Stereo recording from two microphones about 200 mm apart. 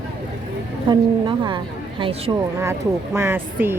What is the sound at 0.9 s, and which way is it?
A woman's voice, 25° right (ahead or behind).